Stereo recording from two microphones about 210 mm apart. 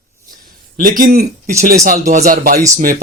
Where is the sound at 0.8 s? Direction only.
40° right (ahead or behind).